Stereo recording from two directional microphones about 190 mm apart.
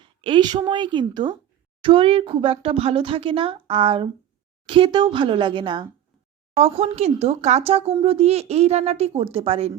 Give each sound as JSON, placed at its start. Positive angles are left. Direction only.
{"t": 0.0, "sound": "speech", "side_deg": -25}